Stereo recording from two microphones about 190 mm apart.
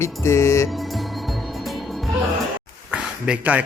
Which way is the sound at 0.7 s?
Centre (ahead or behind).